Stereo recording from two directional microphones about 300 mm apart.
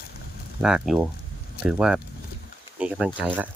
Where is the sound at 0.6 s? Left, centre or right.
Centre.